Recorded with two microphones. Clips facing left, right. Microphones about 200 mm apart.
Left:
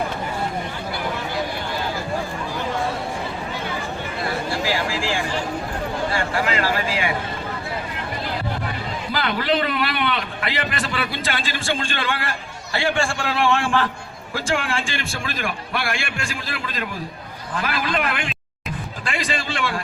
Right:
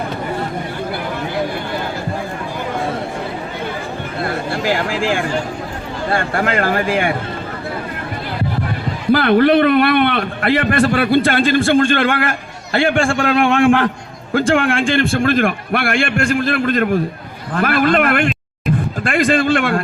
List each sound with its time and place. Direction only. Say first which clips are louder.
4.2 s a sound: right 4 dB; 55° right (ahead or behind)
6.1 s a man's voice: right 8 dB; 55° right (ahead or behind)
9.1 s a man's voice: right 11 dB; 60° right (ahead or behind)